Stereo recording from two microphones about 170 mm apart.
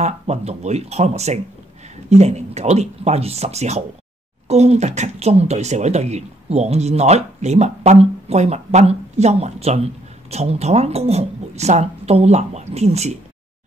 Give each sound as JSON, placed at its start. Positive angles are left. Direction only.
{"t": 0.0, "sound": "speech", "side_deg": -40}